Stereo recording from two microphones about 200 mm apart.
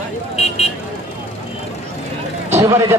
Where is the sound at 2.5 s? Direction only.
15° right (ahead or behind).